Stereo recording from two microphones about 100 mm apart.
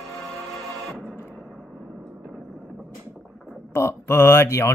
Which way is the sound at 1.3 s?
5° left (ahead or behind).